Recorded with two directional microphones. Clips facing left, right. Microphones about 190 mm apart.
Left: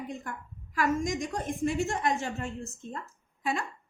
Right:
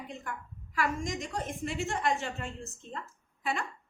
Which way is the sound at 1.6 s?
45° left (ahead or behind).